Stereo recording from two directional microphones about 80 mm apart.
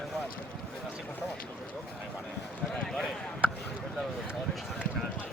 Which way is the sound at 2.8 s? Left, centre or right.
Centre.